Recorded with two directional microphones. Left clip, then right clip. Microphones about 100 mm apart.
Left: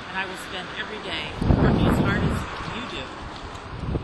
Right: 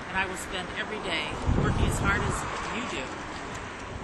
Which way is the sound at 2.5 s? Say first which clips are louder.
Even; 25° right (ahead or behind).